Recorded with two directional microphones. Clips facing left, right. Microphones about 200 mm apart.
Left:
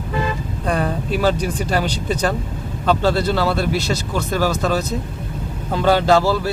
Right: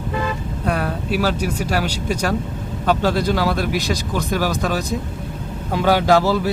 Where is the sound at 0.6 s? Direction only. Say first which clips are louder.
Left 2 dB; 5° right (ahead or behind).